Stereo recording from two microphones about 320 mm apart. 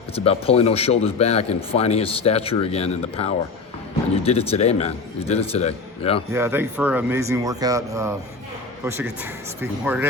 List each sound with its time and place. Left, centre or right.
0.3 s speech: centre
6.3 s speech: centre
9.6 s speech: centre